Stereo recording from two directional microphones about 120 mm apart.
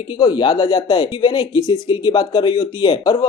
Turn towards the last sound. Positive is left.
turn(degrees=35)  # may be behind; listen again after turning